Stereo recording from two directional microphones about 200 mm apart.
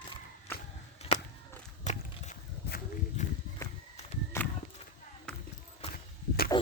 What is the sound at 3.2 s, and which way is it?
Walk, 35° left (ahead or behind).